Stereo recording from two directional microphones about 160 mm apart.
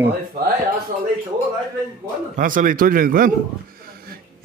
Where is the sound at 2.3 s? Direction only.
55° right (ahead or behind).